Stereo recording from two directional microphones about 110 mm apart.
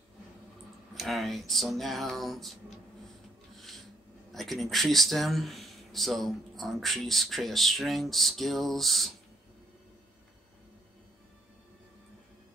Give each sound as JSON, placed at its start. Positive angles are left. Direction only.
{"t": 0.9, "sound": "speech", "side_deg": 0}
{"t": 4.3, "sound": "speech", "side_deg": 0}